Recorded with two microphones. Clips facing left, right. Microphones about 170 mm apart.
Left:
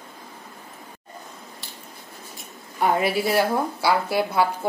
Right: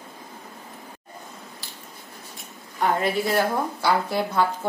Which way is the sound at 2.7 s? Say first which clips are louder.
Left 1 dB; 10° left (ahead or behind).